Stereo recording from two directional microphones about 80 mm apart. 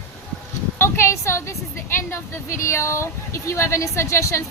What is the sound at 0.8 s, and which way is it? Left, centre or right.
A woman's voice, left.